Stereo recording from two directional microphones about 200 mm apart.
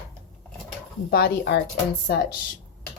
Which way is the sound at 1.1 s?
55° left (ahead or behind).